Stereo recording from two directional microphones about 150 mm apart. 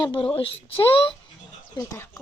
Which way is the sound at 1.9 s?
20° left (ahead or behind).